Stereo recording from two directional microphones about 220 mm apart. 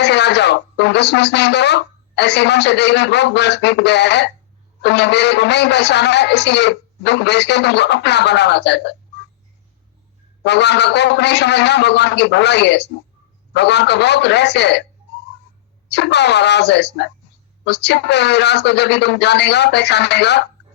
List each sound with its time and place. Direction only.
0.0 s speech: 50° left (ahead or behind)
10.4 s speech: 50° left (ahead or behind)
15.9 s speech: 50° left (ahead or behind)